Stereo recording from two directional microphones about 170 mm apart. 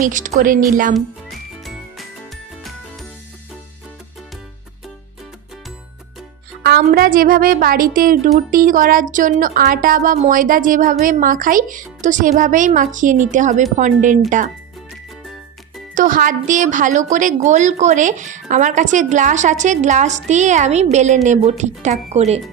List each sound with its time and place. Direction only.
0.0 s a woman's voice: 50° right (ahead or behind)
6.6 s a woman's voice: 65° right (ahead or behind); by 14.2 s 45° right (ahead or behind)
16.0 s a woman's voice: 50° right (ahead or behind)